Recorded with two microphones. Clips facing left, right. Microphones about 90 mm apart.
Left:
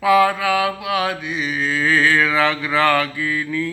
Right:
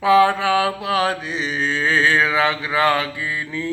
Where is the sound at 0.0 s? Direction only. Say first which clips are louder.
Right 1 dB; 30° right (ahead or behind).